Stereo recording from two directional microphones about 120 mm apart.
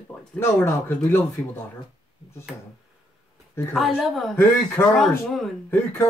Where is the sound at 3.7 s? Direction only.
Centre (ahead or behind).